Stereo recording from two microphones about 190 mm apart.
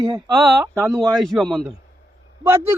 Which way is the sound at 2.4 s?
15° right (ahead or behind).